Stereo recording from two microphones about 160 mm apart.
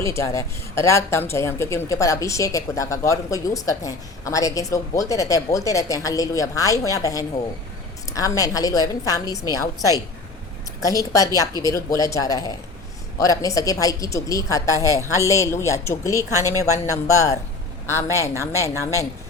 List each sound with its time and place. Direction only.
0.0 s a woman's voice: 20° left (ahead or behind)